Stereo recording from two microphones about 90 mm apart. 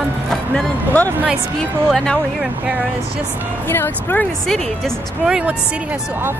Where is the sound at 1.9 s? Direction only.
10° left (ahead or behind).